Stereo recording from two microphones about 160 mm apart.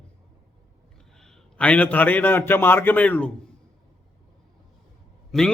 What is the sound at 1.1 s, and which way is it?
A man's voice, 5° left (ahead or behind).